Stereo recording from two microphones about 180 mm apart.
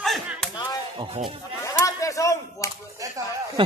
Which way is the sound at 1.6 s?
15° left (ahead or behind).